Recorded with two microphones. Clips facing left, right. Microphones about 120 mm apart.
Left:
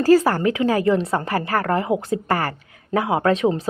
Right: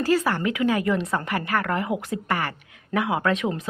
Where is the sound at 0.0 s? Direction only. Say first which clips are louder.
Left 7 dB; 40° left (ahead or behind).